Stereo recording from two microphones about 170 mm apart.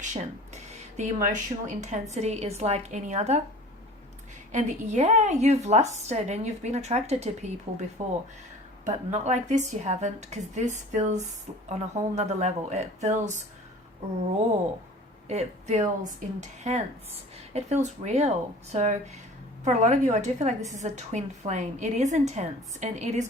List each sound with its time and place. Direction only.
0.1 s a woman's voice: 45° right (ahead or behind)
4.5 s a woman's voice: 45° right (ahead or behind)
15.3 s a woman's voice: 40° right (ahead or behind)